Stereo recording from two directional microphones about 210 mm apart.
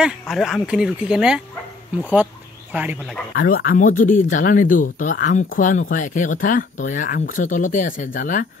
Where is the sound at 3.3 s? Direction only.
45° left (ahead or behind).